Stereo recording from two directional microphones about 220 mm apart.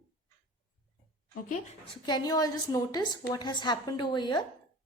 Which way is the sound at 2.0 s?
15° left (ahead or behind).